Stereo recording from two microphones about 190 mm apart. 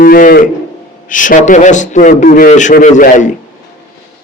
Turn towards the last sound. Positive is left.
turn(degrees=40)  # may be behind; listen again after turning